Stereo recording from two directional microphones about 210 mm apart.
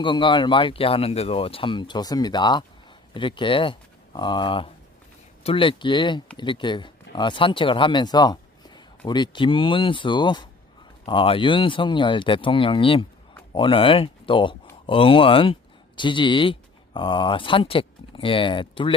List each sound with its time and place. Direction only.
0.0 s speech: 25° left (ahead or behind)